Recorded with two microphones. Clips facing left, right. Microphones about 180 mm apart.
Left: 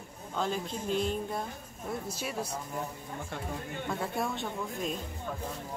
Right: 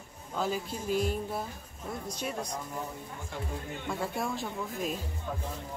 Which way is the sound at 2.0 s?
5° left (ahead or behind).